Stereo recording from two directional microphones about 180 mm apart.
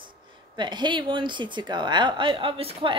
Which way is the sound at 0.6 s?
25° right (ahead or behind).